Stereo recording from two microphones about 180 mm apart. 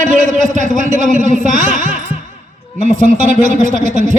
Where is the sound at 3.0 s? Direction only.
45° right (ahead or behind).